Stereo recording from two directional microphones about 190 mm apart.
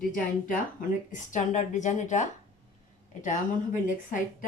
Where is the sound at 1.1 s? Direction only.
40° left (ahead or behind).